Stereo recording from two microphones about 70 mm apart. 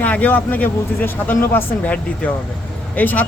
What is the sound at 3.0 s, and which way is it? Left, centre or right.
Speech, left.